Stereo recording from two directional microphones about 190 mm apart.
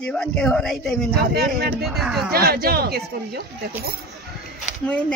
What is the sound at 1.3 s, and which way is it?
Speech, 55° right (ahead or behind).